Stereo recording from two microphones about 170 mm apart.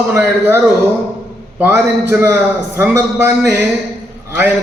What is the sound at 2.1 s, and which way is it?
A man's voice, 15° right (ahead or behind).